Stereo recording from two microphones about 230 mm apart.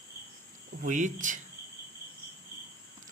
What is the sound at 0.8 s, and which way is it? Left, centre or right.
Speech, right.